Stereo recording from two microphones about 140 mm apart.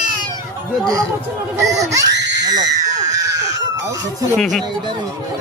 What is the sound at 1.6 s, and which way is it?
Screaming, 25° right (ahead or behind).